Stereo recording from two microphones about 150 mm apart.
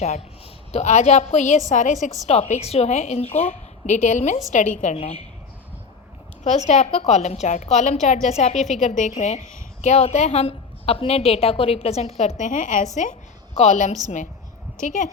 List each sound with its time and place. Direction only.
0.7 s a woman's voice: 50° left (ahead or behind)
4.9 s a woman's voice: 40° left (ahead or behind)
6.4 s a woman's voice: 50° left (ahead or behind)